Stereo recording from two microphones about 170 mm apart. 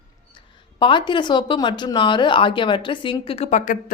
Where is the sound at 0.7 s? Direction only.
30° left (ahead or behind); by 3.9 s 50° left (ahead or behind).